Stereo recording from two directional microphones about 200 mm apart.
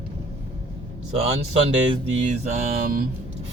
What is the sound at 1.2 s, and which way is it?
Speech, 30° right (ahead or behind).